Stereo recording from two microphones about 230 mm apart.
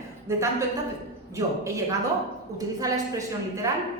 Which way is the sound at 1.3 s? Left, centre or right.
Centre.